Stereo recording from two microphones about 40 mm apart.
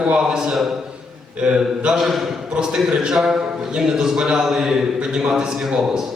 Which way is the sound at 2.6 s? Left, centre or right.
Centre.